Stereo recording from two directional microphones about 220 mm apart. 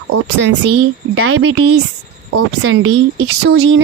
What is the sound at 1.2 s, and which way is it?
Speech, 70° right (ahead or behind).